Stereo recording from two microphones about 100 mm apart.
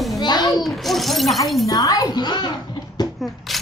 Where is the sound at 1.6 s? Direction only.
35° left (ahead or behind).